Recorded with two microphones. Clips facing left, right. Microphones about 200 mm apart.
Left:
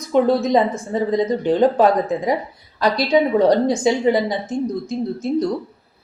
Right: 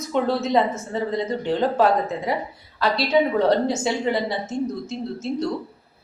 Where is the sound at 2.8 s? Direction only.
15° left (ahead or behind).